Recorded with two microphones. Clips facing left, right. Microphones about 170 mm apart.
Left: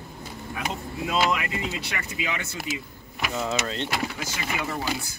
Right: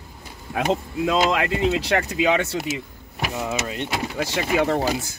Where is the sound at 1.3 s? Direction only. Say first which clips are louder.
Right 7 dB; 75° right (ahead or behind).